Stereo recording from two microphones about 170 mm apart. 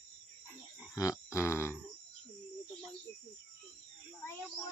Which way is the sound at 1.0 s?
20° left (ahead or behind).